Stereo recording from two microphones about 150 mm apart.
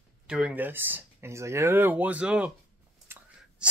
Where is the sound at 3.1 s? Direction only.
15° right (ahead or behind).